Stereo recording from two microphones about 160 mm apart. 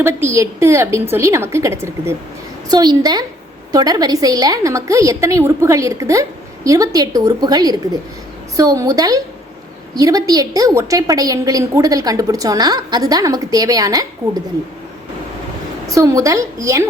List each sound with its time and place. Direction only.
0.0 s a woman's voice: 15° right (ahead or behind)
15.9 s a woman's voice: 20° right (ahead or behind)